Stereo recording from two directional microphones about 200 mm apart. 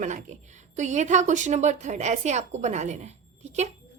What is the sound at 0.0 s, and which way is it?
A woman's voice, 35° right (ahead or behind).